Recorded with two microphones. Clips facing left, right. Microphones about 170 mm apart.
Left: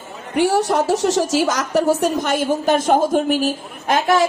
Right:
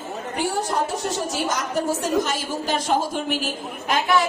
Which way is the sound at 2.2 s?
55° left (ahead or behind).